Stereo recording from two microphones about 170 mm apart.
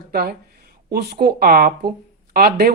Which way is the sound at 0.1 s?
65° right (ahead or behind).